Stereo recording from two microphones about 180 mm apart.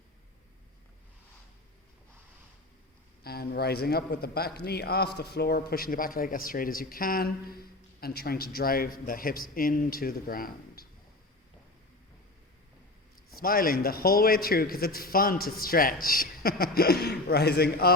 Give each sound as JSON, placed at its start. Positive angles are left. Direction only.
{"t": 3.2, "sound": "a man's voice", "side_deg": 60}
{"t": 13.4, "sound": "a man's voice", "side_deg": 55}